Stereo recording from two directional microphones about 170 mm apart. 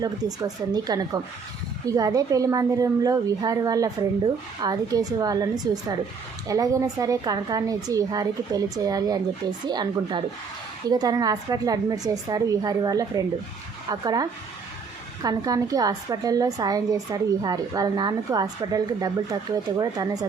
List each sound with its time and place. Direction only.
0.0 s a woman's voice: 20° right (ahead or behind)